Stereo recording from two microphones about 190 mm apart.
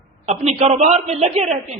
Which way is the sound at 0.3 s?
35° right (ahead or behind).